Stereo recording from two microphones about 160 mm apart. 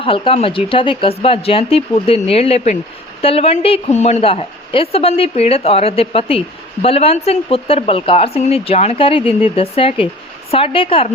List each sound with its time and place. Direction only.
0.0 s speech: 35° left (ahead or behind)